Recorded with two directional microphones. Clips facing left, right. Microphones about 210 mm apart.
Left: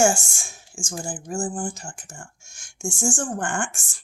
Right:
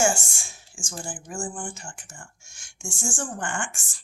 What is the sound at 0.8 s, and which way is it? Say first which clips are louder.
Speech: left 5 dB; 50° left (ahead or behind).